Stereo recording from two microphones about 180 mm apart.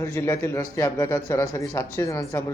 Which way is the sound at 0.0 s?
15° left (ahead or behind).